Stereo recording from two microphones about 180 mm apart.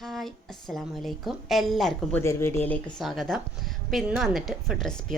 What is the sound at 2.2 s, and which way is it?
A woman's voice, 15° left (ahead or behind).